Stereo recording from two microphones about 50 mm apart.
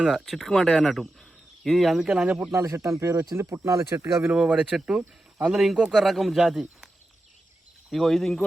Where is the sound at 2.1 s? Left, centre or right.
Centre.